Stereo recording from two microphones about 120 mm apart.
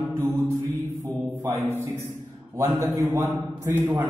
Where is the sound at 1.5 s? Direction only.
20° right (ahead or behind).